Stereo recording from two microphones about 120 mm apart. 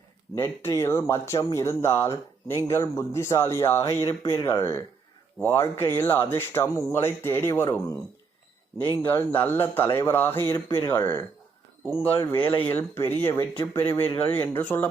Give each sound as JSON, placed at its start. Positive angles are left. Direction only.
{"t": 0.7, "sound": "speech", "side_deg": 20}